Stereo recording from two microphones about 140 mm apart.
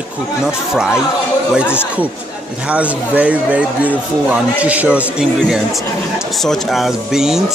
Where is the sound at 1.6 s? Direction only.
15° left (ahead or behind).